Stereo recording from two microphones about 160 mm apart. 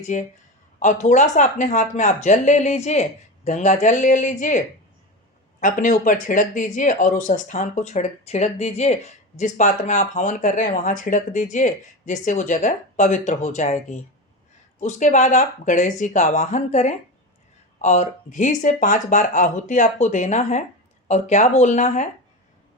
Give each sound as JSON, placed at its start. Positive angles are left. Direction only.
{"t": 0.1, "sound": "speech", "side_deg": 50}